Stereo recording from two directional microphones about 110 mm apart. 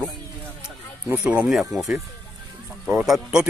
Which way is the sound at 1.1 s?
10° right (ahead or behind).